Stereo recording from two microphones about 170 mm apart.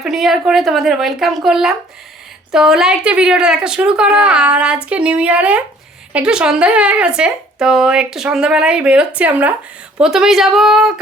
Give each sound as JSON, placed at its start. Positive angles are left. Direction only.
{"t": 0.0, "sound": "a woman's voice", "side_deg": 0}